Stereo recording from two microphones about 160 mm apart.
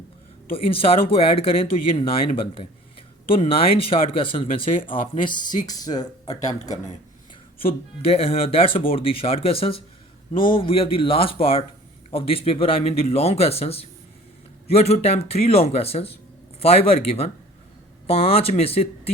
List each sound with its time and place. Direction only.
0.5 s speech: 35° left (ahead or behind)
7.6 s speech: 35° left (ahead or behind)